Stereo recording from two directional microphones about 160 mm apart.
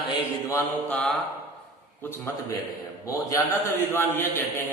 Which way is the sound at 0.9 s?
5° left (ahead or behind).